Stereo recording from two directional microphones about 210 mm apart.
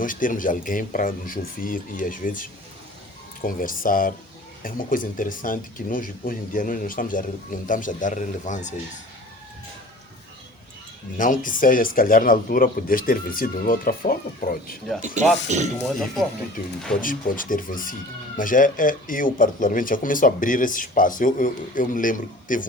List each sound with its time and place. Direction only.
0.0 s speech: 40° left (ahead or behind)
11.2 s speech: 40° left (ahead or behind)
15.0 s speech: 35° right (ahead or behind)
17.0 s speech: 40° left (ahead or behind)